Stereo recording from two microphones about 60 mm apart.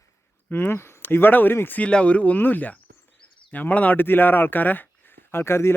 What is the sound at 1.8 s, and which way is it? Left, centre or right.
Speech, centre.